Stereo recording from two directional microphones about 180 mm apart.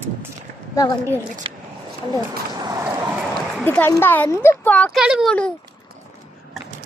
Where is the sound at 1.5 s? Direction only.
30° right (ahead or behind).